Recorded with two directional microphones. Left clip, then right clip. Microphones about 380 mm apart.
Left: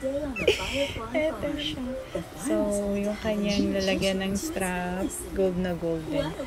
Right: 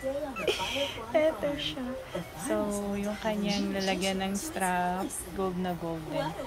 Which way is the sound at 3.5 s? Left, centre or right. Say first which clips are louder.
Left 4 dB; centre.